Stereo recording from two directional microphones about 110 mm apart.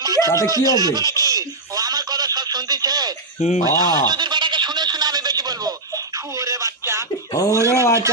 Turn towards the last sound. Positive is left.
turn(degrees=-25)  # may be behind; listen again after turning